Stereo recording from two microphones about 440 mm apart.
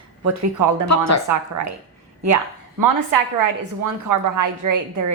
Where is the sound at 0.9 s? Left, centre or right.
Left.